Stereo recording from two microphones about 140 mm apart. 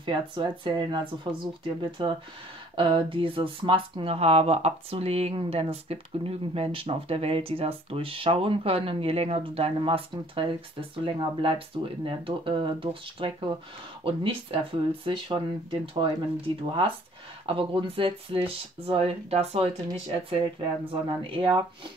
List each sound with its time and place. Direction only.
0.0 s speech: 35° right (ahead or behind)
17.5 s speech: 40° right (ahead or behind)